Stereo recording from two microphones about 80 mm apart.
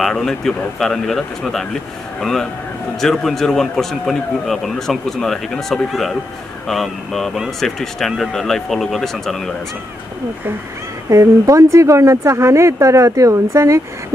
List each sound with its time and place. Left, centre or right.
0.0 s a man's voice: centre
11.1 s speech: right